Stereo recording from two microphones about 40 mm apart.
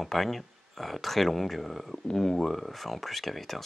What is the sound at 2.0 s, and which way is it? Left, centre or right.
Speech, centre.